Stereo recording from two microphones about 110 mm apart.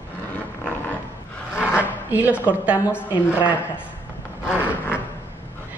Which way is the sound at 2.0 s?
15° right (ahead or behind).